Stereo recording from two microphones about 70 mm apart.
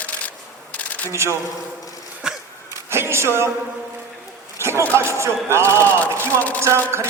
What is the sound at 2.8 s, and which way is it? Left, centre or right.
Speech, right.